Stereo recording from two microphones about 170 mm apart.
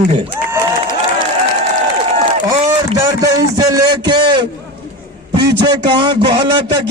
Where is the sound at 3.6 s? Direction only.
25° right (ahead or behind).